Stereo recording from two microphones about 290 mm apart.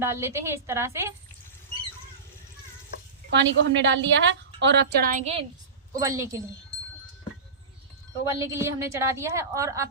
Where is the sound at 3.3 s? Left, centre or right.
Right.